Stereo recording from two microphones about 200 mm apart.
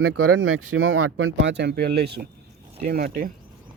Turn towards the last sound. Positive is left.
turn(degrees=-50)  # may be behind; listen again after turning